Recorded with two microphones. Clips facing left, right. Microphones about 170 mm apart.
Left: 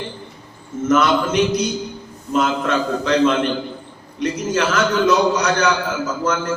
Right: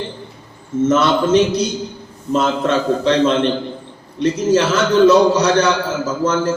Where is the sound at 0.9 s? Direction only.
30° right (ahead or behind).